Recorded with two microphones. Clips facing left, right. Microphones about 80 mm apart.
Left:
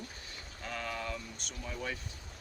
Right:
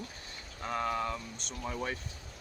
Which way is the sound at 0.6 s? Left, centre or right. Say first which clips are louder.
Right 6 dB; right.